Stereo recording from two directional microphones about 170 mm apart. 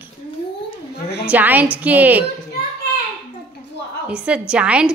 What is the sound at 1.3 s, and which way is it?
Speech, 10° right (ahead or behind).